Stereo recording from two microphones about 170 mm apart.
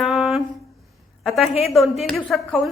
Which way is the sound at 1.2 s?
Centre (ahead or behind).